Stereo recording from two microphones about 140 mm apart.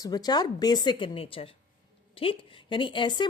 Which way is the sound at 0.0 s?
30° left (ahead or behind).